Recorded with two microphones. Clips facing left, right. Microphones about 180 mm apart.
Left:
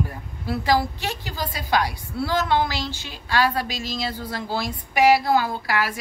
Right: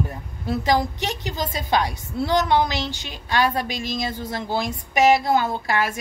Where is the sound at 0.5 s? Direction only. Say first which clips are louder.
Right 1 dB; 20° right (ahead or behind).